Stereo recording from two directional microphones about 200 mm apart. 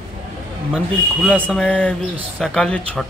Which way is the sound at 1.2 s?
5° left (ahead or behind).